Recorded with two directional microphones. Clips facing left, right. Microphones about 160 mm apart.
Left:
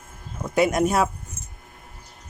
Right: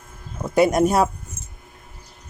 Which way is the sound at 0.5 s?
35° right (ahead or behind).